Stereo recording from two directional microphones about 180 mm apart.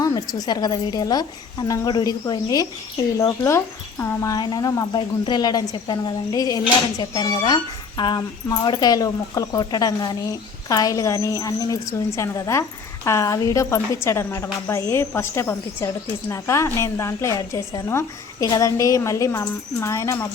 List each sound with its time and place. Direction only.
0.0 s a woman's voice: 20° left (ahead or behind)